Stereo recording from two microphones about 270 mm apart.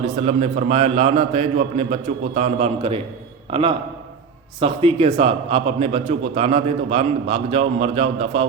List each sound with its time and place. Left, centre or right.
0.2 s a man's voice: right